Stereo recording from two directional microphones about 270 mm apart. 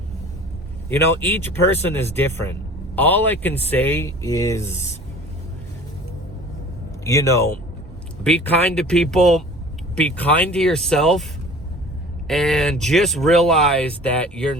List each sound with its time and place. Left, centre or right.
0.9 s speech: centre
7.0 s speech: centre
12.3 s speech: centre